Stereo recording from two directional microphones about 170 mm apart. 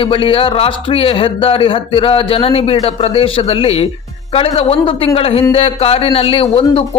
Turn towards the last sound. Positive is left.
turn(degrees=35)  # may be behind; listen again after turning